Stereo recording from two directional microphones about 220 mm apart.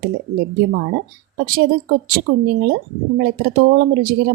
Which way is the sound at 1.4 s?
40° right (ahead or behind).